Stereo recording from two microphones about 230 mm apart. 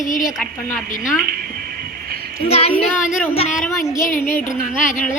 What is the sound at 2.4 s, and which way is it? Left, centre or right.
Child singing, left.